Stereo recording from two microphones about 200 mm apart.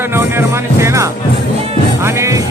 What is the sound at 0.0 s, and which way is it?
Speech, 10° right (ahead or behind).